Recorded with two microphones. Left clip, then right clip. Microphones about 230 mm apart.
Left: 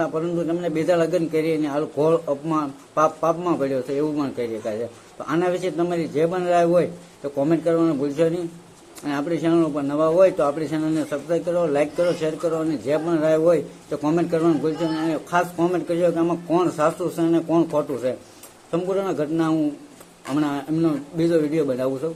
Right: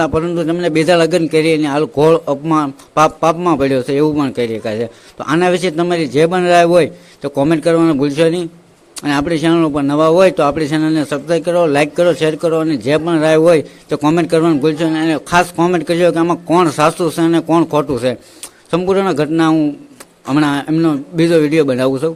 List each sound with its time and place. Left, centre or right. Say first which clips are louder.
0.0 s a man's voice: right 8 dB; right